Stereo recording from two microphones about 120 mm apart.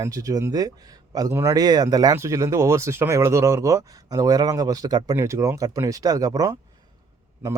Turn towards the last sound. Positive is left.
turn(degrees=-20)  # may be behind; listen again after turning